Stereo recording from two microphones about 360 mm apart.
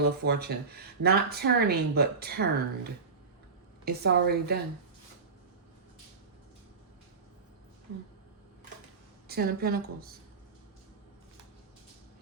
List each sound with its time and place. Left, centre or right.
0.0 s speech: right
3.8 s speech: right
9.2 s speech: right